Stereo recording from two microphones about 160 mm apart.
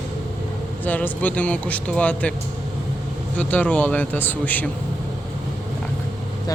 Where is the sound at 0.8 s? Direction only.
10° left (ahead or behind).